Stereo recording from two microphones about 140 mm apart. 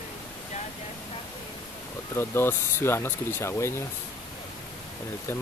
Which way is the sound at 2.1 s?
15° left (ahead or behind).